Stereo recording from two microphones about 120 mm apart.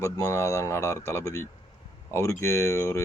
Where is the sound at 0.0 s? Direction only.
25° left (ahead or behind).